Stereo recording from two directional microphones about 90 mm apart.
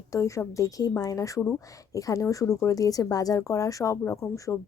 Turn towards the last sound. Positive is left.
turn(degrees=35)  # may be behind; listen again after turning